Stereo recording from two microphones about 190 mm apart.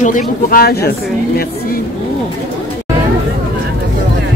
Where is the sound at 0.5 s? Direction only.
50° left (ahead or behind).